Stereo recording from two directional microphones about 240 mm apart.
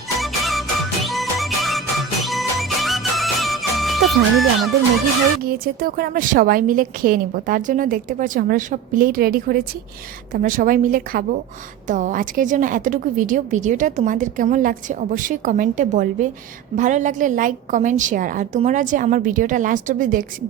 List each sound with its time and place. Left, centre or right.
0.2 s music: centre
5.4 s a woman's voice: right